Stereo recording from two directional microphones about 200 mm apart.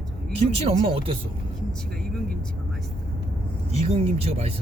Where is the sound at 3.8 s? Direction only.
30° right (ahead or behind).